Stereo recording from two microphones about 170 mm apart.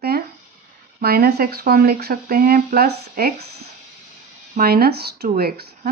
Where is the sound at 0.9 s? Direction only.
60° right (ahead or behind).